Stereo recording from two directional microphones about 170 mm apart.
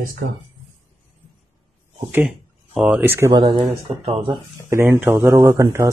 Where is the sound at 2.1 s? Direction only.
10° right (ahead or behind).